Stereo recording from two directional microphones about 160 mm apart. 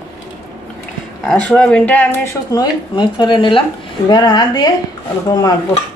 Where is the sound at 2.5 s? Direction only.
25° left (ahead or behind).